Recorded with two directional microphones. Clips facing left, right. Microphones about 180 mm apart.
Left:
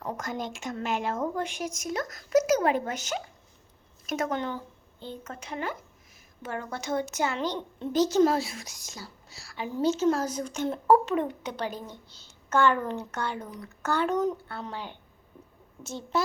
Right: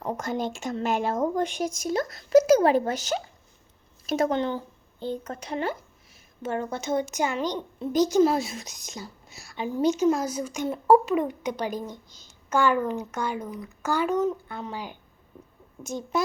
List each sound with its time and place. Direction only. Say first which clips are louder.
0.0 s a woman's voice: right 5 dB; 25° right (ahead or behind)
16.1 s a woman's voice: right 1 dB; 15° right (ahead or behind)